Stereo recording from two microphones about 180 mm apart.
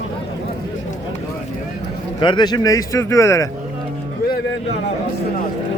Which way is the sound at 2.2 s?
25° left (ahead or behind).